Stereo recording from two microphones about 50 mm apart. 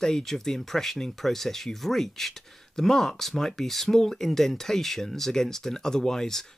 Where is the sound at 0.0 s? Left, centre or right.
Centre.